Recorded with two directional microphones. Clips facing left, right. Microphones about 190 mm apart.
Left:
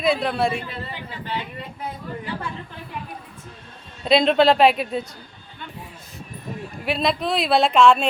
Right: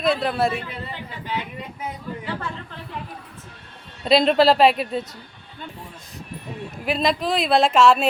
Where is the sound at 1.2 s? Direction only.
15° right (ahead or behind).